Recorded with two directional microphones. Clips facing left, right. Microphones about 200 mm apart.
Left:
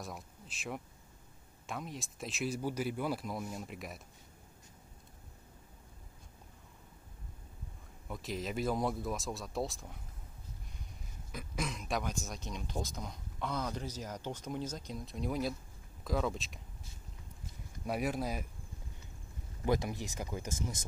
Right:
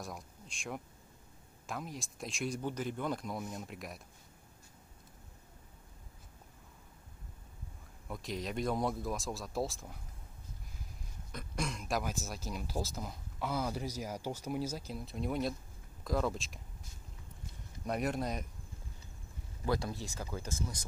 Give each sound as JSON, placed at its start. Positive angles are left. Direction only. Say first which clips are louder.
{"t": 0.0, "sound": "speech", "louder": "even", "side_deg": 0}
{"t": 8.1, "sound": "speech", "louder": "even", "side_deg": 0}
{"t": 11.3, "sound": "speech", "louder": "even", "side_deg": 0}
{"t": 17.8, "sound": "speech", "louder": "even", "side_deg": 5}
{"t": 19.6, "sound": "speech", "louder": "left 2 dB", "side_deg": 20}